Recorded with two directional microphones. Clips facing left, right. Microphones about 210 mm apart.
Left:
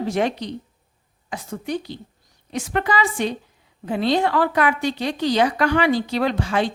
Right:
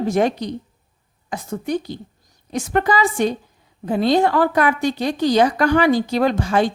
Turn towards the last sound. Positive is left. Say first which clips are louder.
# right 4 dB
turn(degrees=-45)  # may be behind; listen again after turning